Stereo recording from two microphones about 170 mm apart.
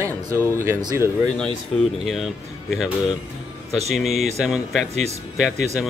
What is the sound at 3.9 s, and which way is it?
Speech, centre (ahead or behind).